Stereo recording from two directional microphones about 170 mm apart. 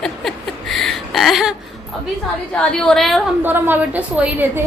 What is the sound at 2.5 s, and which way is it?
Speech, 5° left (ahead or behind).